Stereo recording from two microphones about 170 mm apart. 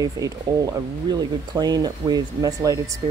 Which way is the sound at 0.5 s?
20° right (ahead or behind).